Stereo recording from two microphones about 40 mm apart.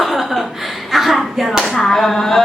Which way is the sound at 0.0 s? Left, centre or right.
Centre.